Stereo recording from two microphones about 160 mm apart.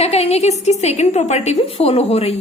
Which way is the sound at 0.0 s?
40° left (ahead or behind).